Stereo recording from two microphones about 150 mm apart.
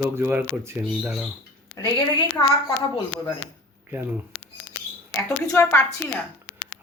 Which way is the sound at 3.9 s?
15° right (ahead or behind).